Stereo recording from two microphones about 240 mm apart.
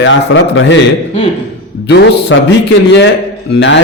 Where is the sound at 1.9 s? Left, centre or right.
Left.